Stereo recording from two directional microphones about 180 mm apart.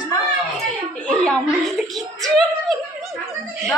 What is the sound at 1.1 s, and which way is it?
Speech, centre (ahead or behind).